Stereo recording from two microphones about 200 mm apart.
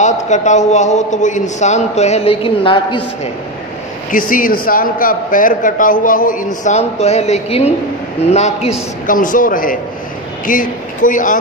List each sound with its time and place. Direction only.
0.0 s a man's voice: 35° left (ahead or behind)
4.1 s a man's voice: 45° left (ahead or behind)